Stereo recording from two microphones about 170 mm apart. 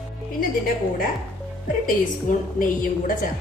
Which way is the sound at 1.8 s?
55° left (ahead or behind).